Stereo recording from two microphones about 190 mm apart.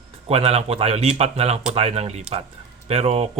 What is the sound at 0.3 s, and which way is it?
Speech, 30° right (ahead or behind).